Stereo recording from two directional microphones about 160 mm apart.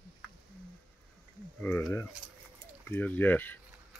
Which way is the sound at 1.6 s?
15° left (ahead or behind).